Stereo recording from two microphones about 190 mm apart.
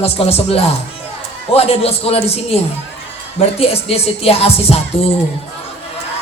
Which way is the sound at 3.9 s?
30° left (ahead or behind).